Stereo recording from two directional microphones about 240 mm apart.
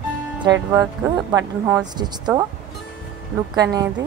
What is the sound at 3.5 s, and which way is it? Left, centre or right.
Speech, centre.